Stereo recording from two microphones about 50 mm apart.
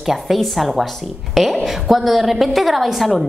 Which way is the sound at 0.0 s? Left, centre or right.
Centre.